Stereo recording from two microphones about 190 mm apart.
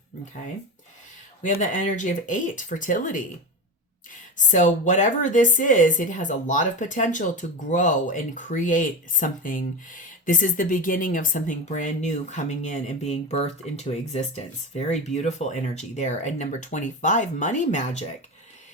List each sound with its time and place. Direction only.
1.4 s speech: 40° left (ahead or behind)
4.4 s speech: 40° left (ahead or behind)